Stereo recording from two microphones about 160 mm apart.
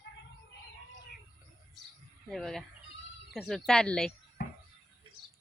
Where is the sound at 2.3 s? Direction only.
Centre (ahead or behind).